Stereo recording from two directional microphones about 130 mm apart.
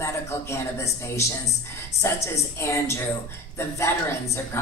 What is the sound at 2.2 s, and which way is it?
A woman's voice, 20° left (ahead or behind).